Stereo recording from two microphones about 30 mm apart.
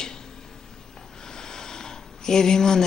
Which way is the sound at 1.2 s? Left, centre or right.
Centre.